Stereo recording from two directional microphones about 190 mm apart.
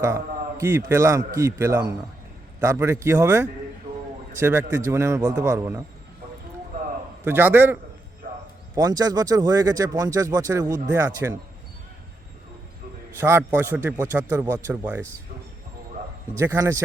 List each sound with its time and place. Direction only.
0.0 s a man's voice: 15° right (ahead or behind)
7.3 s a man's voice: 10° right (ahead or behind)
13.1 s a man's voice: 15° right (ahead or behind)
16.4 s a man's voice: 15° right (ahead or behind)